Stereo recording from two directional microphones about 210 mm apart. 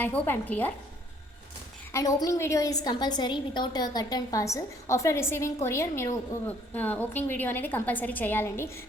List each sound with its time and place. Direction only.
0.0 s a woman's voice: 10° left (ahead or behind)
1.9 s a woman's voice: 15° left (ahead or behind)